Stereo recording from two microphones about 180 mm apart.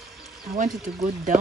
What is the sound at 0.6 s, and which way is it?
Speech, 45° right (ahead or behind).